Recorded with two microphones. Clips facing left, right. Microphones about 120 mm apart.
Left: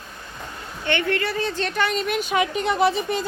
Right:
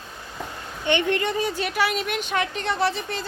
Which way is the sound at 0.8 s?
20° right (ahead or behind).